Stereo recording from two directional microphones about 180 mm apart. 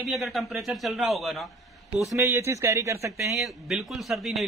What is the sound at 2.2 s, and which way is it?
Speech, 15° right (ahead or behind).